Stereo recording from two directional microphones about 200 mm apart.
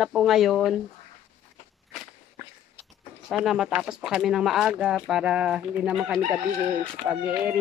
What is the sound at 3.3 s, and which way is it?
Speech, 5° right (ahead or behind).